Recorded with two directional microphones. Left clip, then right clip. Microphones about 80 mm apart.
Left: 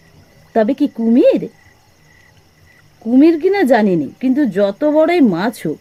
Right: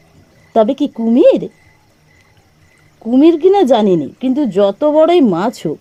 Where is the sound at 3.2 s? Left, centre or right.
Right.